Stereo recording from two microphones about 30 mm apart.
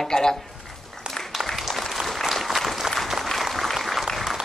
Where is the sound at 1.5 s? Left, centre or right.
Centre.